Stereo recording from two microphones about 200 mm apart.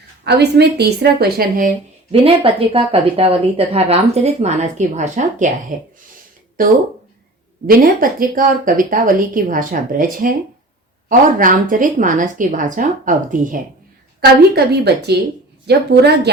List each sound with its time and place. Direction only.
0.3 s a woman's voice: 55° right (ahead or behind)
2.2 s a woman's voice: 25° right (ahead or behind); by 10.3 s 45° right (ahead or behind)
11.7 s a woman's voice: 40° right (ahead or behind)
14.2 s a woman's voice: 50° right (ahead or behind)